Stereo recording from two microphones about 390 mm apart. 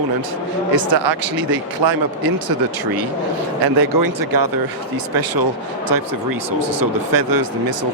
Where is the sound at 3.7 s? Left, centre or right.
Right.